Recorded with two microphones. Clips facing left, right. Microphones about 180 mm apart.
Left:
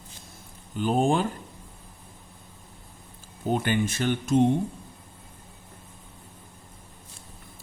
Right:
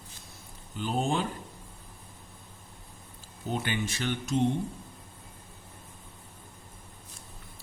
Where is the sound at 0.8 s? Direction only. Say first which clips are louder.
Left 6 dB; 50° left (ahead or behind).